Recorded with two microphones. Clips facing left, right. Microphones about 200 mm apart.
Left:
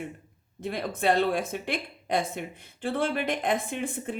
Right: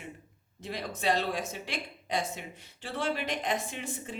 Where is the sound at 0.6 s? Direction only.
55° left (ahead or behind).